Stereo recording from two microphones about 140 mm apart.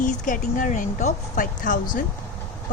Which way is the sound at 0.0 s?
70° left (ahead or behind).